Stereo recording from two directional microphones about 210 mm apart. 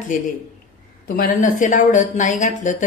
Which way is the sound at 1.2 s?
40° left (ahead or behind).